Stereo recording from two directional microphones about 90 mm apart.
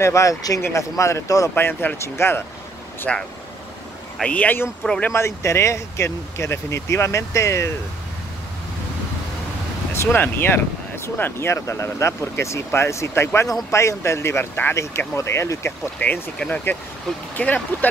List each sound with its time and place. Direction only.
0.0 s speech: 35° left (ahead or behind)
1.5 s speech: 25° left (ahead or behind)
3.1 s speech: 10° left (ahead or behind)
5.1 s speech: 30° left (ahead or behind)
9.9 s speech: 25° left (ahead or behind)
16.0 s speech: 15° left (ahead or behind)